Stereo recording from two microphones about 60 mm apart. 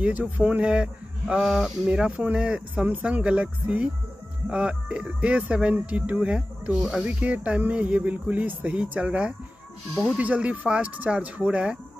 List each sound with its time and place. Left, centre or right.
0.0 s speech: right
0.7 s speech: centre
1.4 s speech: centre
1.9 s speech: centre
6.8 s speech: centre
7.1 s speech: right